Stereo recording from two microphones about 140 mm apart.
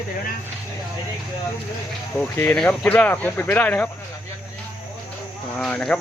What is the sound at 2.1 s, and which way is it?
Speech, 5° left (ahead or behind).